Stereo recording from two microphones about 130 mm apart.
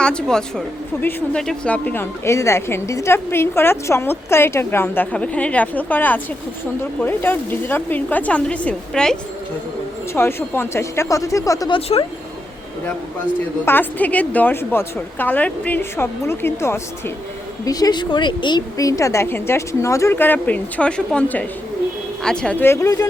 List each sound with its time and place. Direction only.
0.0 s a woman's voice: 5° left (ahead or behind)
10.2 s a woman's voice: 20° left (ahead or behind)
11.7 s speech: 45° left (ahead or behind)
13.7 s a woman's voice: 15° left (ahead or behind)